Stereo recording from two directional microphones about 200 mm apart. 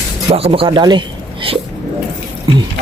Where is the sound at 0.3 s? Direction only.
30° right (ahead or behind).